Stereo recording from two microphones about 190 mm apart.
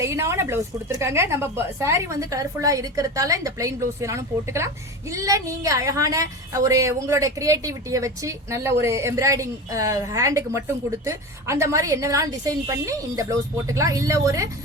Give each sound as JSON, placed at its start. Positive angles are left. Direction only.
{"t": 0.0, "sound": "a woman's voice", "side_deg": -15}